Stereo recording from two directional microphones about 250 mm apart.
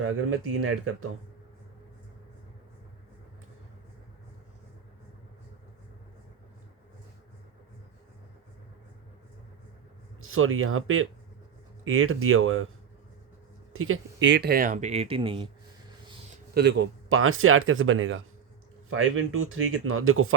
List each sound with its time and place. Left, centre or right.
0.6 s speech: right
10.2 s speech: right
13.7 s speech: right
16.6 s speech: right